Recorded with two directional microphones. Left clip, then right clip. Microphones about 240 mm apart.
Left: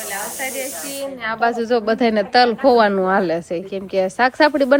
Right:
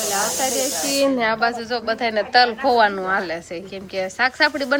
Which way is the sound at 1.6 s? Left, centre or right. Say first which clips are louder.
Left 5 dB; left.